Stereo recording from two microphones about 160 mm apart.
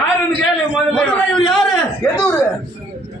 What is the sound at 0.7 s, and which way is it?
A man's voice, 5° left (ahead or behind).